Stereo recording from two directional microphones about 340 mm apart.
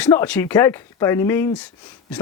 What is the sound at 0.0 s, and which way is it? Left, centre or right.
Speech, centre.